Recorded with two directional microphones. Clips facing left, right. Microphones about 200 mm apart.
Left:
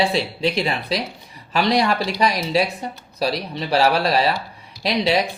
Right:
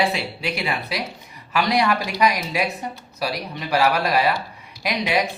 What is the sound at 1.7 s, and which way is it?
Speech, 30° left (ahead or behind).